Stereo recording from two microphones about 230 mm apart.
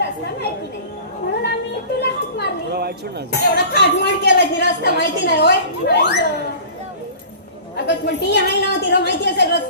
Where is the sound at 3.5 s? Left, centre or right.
Left.